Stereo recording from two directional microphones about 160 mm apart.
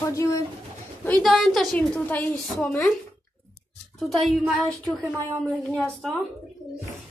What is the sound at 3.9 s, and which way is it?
Speech, centre (ahead or behind).